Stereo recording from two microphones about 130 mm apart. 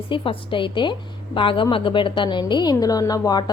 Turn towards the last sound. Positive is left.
turn(degrees=30)  # may be behind; listen again after turning